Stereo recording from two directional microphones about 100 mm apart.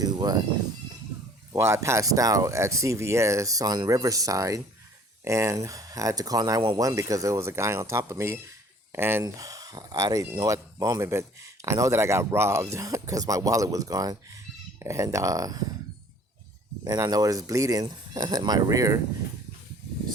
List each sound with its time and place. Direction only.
0.0 s speech: 45° right (ahead or behind)
1.5 s speech: 30° right (ahead or behind)
9.2 s speech: 35° right (ahead or behind)
16.8 s speech: 35° right (ahead or behind)